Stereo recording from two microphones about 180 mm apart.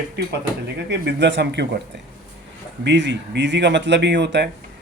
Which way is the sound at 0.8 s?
75° right (ahead or behind).